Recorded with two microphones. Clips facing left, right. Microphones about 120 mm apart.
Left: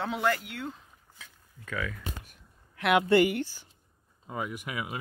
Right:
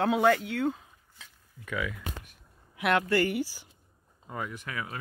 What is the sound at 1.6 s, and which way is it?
Speech, 15° right (ahead or behind).